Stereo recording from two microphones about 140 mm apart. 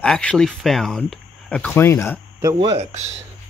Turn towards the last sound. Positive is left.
turn(degrees=-50)  # may be behind; listen again after turning